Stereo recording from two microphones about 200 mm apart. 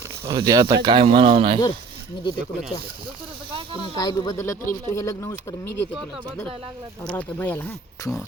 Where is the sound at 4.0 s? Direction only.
20° left (ahead or behind).